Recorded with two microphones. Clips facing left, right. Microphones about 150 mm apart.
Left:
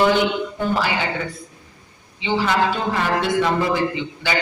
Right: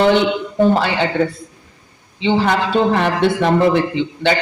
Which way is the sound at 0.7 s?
65° right (ahead or behind).